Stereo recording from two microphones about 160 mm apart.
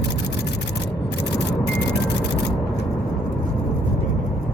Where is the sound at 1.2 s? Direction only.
90° left.